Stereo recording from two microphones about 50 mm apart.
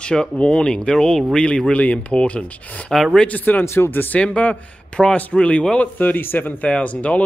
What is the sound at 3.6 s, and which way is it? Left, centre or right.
Speech, left.